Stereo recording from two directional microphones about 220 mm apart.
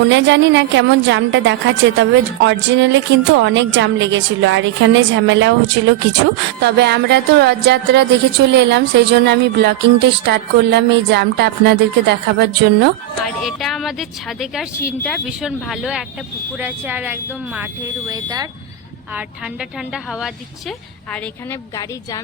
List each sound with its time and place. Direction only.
0.0 s a woman's voice: 55° right (ahead or behind)
6.6 s speech: 50° right (ahead or behind)
13.2 s speech: centre (ahead or behind); by 18.4 s 15° right (ahead or behind)
19.9 s speech: centre (ahead or behind)